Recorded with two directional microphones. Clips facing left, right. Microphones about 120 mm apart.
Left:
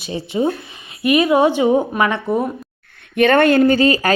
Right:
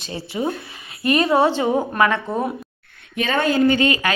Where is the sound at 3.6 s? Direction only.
35° left (ahead or behind).